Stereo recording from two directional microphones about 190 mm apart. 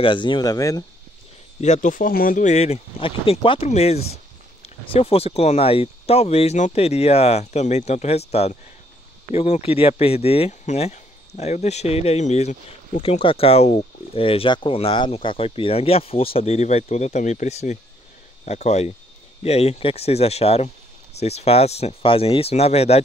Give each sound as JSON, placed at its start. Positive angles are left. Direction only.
{"t": 0.0, "sound": "speech", "side_deg": 25}
{"t": 1.6, "sound": "speech", "side_deg": 40}